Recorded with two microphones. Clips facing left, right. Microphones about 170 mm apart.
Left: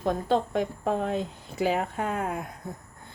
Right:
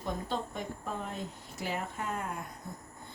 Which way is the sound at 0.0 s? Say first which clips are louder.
Left 10 dB; 85° left.